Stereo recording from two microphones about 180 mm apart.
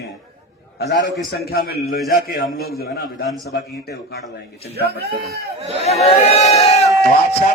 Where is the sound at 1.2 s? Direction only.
60° left (ahead or behind).